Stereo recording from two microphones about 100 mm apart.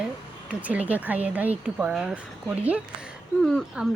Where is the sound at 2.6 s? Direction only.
15° right (ahead or behind).